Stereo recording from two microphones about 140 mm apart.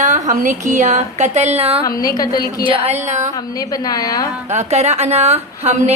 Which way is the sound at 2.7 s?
45° right (ahead or behind).